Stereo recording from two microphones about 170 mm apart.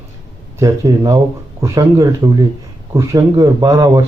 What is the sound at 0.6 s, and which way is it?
Speech, 20° right (ahead or behind).